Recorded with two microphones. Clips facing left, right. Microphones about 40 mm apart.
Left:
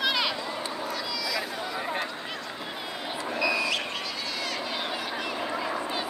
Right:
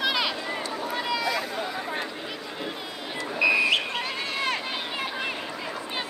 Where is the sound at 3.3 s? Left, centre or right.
Right.